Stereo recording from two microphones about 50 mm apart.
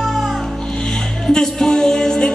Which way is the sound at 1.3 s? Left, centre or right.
Centre.